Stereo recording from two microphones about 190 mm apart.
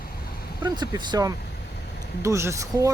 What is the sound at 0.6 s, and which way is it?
Speech, 25° right (ahead or behind).